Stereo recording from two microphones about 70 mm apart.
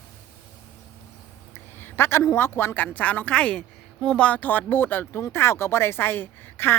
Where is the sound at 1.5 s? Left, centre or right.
Left.